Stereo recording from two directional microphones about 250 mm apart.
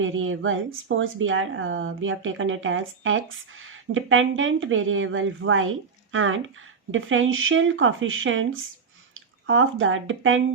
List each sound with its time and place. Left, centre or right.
0.0 s speech: right